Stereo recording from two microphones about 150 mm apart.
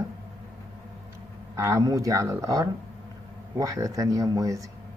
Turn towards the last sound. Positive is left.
turn(degrees=-20)  # may be behind; listen again after turning